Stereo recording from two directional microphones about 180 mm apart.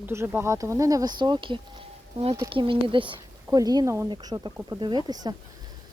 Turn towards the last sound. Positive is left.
turn(degrees=-25)  # may be behind; listen again after turning